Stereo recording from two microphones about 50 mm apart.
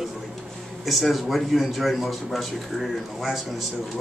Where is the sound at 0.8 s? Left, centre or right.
Centre.